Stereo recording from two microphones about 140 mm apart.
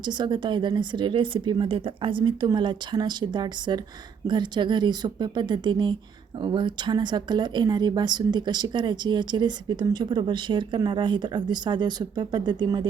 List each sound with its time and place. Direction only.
0.0 s speech: 35° right (ahead or behind)